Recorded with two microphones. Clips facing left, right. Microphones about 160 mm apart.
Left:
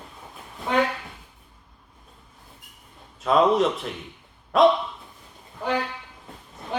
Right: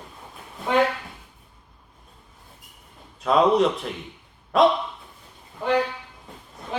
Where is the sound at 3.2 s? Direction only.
Centre (ahead or behind).